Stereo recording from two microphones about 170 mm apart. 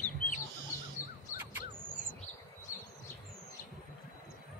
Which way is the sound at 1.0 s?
15° left (ahead or behind).